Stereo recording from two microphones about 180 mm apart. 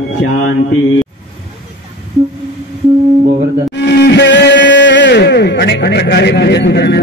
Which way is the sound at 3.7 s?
65° left (ahead or behind).